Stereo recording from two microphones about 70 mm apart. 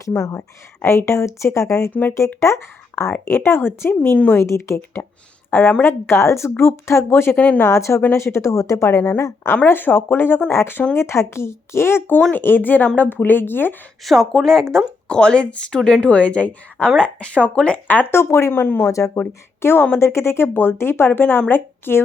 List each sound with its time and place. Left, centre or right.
0.0 s a woman's voice: left
0.3 s speech: left
1.9 s speech: left
2.1 s speech: left
5.5 s speech: left
7.3 s speech: left
7.6 s a woman's voice: left
8.9 s speech: left
14.0 s speech: centre; by 18.1 s left
18.1 s speech: left
18.9 s a woman's voice: left
19.6 s speech: left